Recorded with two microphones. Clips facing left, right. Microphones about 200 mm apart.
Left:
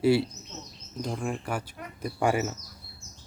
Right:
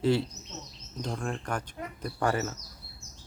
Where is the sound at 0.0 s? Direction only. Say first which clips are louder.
Left 3 dB; 10° left (ahead or behind).